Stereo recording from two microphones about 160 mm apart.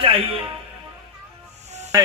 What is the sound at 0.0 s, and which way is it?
Speech, 35° right (ahead or behind).